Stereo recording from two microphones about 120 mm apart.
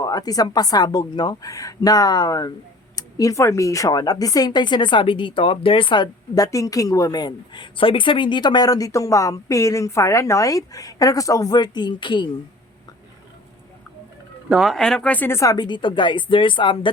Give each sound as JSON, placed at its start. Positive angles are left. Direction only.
{"t": 0.0, "sound": "speech", "side_deg": 30}
{"t": 14.5, "sound": "speech", "side_deg": 0}
{"t": 15.5, "sound": "speech", "side_deg": 40}